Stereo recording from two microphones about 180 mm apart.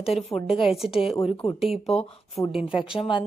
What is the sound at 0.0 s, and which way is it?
A woman's voice, centre (ahead or behind).